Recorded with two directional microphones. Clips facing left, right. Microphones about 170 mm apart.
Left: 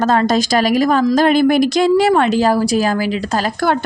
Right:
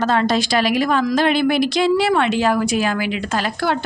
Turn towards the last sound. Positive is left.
turn(degrees=45)  # may be behind; listen again after turning